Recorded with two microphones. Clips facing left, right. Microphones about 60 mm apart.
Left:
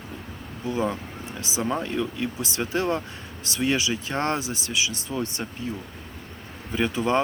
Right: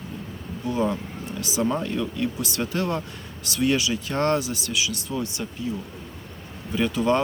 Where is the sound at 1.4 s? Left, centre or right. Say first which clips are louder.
Right 2 dB; left.